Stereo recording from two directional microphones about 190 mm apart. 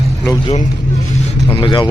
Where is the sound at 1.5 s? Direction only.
25° left (ahead or behind).